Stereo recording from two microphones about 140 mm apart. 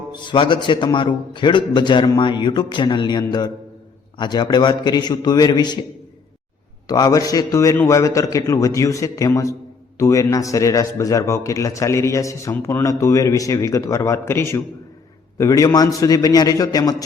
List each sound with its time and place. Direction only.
0.1 s a man's voice: 35° left (ahead or behind)
6.8 s speech: 25° left (ahead or behind)